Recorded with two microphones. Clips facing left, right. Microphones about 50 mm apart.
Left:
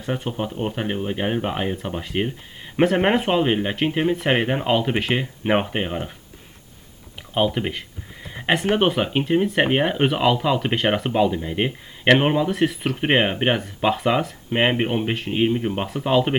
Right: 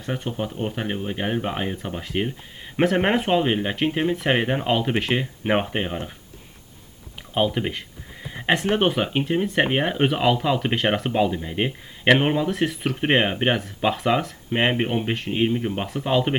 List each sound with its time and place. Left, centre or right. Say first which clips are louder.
0.3 s speech: left 1 dB; centre
7.3 s speech: left 1 dB; centre